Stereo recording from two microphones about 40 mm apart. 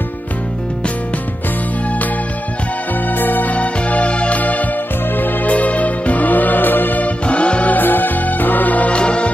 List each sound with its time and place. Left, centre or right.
3.1 s music: left
3.5 s music: left
5.1 s music: left
5.5 s music: left
7.2 s music: left
7.7 s music: left
8.9 s music: left